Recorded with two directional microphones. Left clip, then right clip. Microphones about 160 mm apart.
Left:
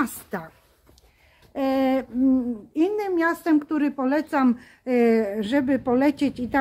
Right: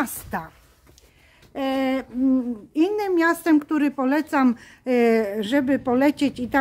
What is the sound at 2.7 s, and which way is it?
Speech, 15° right (ahead or behind).